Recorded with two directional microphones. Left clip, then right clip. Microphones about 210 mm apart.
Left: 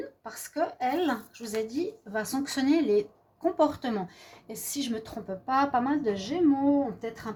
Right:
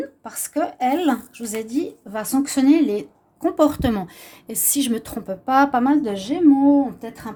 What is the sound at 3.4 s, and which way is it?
A woman's voice, 55° right (ahead or behind).